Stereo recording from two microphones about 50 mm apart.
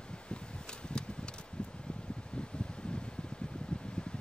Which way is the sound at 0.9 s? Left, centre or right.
Centre.